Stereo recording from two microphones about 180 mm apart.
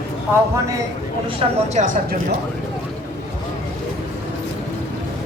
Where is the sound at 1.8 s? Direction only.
50° right (ahead or behind).